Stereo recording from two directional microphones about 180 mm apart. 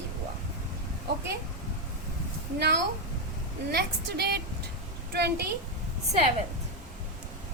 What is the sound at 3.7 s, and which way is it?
A woman's voice, 65° right (ahead or behind).